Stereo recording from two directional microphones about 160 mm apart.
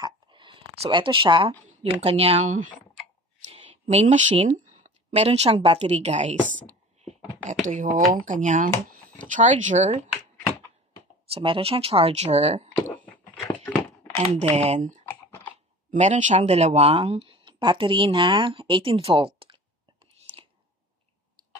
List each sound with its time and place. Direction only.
0.0 s a sound: 30° right (ahead or behind)
1.8 s speech: 40° right (ahead or behind)
3.9 s speech: 45° right (ahead or behind)
7.6 s speech: 50° right (ahead or behind)
11.2 s speech: 35° right (ahead or behind)
12.7 s a sound: 10° left (ahead or behind)
14.4 s speech: 40° right (ahead or behind)
15.0 s typing: 15° left (ahead or behind)
15.9 s speech: 50° right (ahead or behind); by 19.6 s 35° right (ahead or behind)
20.3 s whispering: 30° right (ahead or behind)